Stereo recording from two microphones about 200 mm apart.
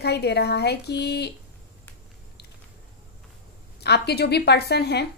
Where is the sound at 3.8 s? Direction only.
55° left (ahead or behind).